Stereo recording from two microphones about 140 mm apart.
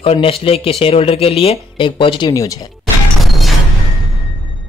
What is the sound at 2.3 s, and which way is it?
Speech, 25° left (ahead or behind).